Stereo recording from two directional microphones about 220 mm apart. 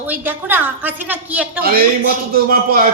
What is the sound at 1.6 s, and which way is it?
A man's voice, 40° right (ahead or behind).